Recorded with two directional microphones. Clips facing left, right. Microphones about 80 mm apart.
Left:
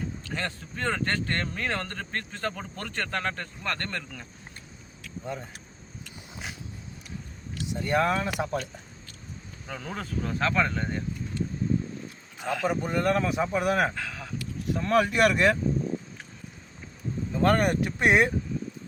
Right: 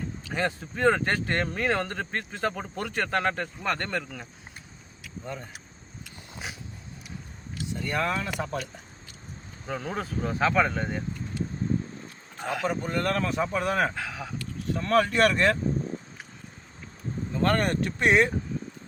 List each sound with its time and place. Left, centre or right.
0.3 s speech: centre
5.2 s speech: centre
7.7 s a man's voice: centre
9.6 s speech: centre
12.6 s a man's voice: centre
13.9 s a sound: centre
14.3 s speech: centre
17.3 s a man's voice: centre